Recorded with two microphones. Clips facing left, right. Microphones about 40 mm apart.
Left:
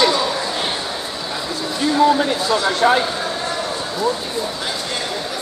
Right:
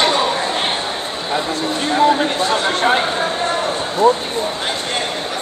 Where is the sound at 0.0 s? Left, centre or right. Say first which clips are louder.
Right 1 dB; right.